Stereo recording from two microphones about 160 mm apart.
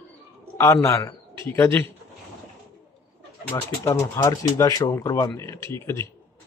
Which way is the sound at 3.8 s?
20° left (ahead or behind).